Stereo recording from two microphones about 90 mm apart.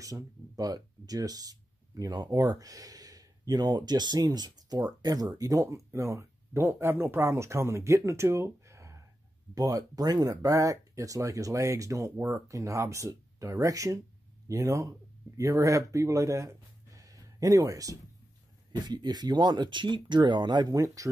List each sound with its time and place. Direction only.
0.0 s speech: 40° right (ahead or behind)
18.9 s speech: 50° right (ahead or behind)
20.7 s speech: 40° right (ahead or behind)